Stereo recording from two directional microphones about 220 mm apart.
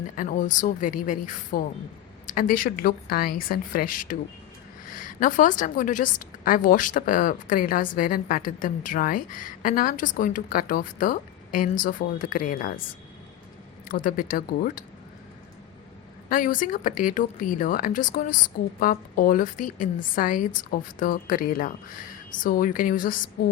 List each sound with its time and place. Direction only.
0.2 s a woman's voice: 35° left (ahead or behind)
5.2 s a woman's voice: 35° left (ahead or behind)
13.8 s a woman's voice: 40° left (ahead or behind)
16.3 s a woman's voice: 40° left (ahead or behind)